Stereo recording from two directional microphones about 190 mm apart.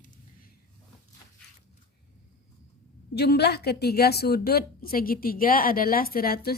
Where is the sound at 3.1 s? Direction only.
60° left (ahead or behind).